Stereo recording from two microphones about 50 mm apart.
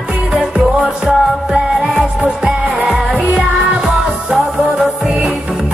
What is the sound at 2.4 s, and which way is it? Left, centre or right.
Music, centre.